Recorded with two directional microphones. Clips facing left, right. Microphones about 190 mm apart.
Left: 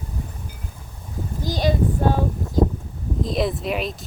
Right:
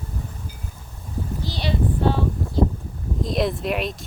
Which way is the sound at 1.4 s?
45° left (ahead or behind).